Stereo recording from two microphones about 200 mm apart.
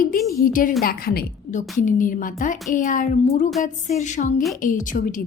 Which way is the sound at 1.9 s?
40° left (ahead or behind).